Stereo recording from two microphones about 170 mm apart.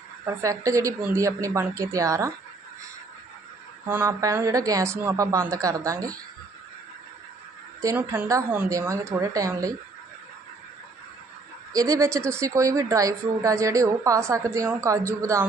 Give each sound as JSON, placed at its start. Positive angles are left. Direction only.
{"t": 0.3, "sound": "a woman's voice", "side_deg": -20}
{"t": 3.8, "sound": "speech", "side_deg": -15}
{"t": 7.8, "sound": "a woman's voice", "side_deg": -15}
{"t": 11.7, "sound": "speech", "side_deg": -20}